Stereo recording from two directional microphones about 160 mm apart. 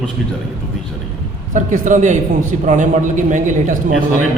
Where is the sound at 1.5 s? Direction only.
55° right (ahead or behind).